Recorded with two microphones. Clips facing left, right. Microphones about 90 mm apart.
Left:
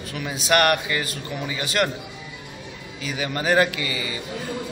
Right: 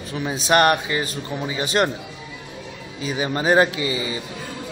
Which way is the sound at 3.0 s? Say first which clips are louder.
Right 3 dB; 25° right (ahead or behind).